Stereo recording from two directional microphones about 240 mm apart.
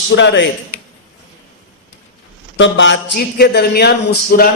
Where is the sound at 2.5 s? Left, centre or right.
Left.